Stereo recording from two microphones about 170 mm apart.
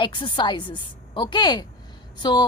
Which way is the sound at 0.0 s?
25° left (ahead or behind).